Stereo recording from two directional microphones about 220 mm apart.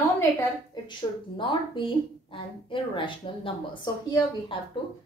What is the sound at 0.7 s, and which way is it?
A woman's voice, 20° left (ahead or behind).